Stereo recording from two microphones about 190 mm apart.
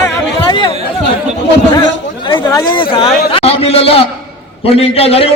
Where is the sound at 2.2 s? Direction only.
25° left (ahead or behind).